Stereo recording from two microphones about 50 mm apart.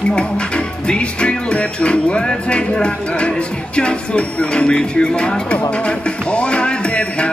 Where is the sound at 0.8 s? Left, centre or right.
Left.